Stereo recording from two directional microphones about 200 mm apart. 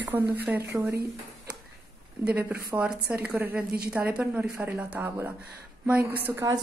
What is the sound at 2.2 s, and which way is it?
Speech, 10° right (ahead or behind).